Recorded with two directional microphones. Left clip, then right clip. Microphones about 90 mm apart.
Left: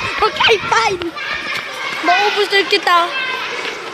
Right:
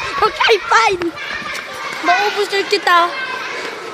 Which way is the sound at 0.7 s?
55° right (ahead or behind).